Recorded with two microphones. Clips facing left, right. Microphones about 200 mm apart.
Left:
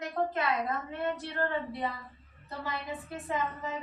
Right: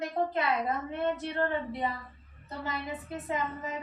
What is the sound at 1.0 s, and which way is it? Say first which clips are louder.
A woman's voice: right 3 dB; 20° right (ahead or behind).